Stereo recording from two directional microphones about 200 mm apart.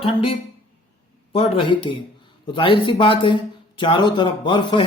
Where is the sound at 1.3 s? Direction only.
25° left (ahead or behind).